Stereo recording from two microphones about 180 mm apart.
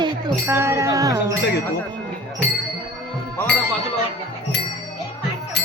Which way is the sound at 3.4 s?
15° left (ahead or behind).